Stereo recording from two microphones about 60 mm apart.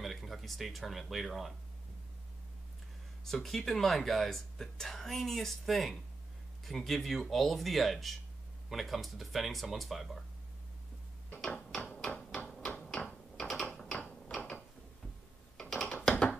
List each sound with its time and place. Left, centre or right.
0.0 s speech: centre
3.3 s speech: centre
12.4 s typewriter: centre
13.6 s mechanisms: centre
15.7 s a sound: centre